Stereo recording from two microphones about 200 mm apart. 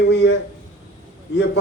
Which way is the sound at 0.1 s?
60° left (ahead or behind).